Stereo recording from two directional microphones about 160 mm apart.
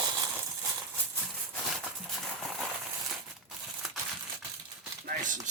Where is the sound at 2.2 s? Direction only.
Centre (ahead or behind).